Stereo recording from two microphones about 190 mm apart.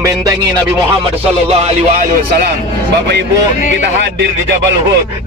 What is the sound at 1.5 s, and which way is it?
Speech, 35° right (ahead or behind).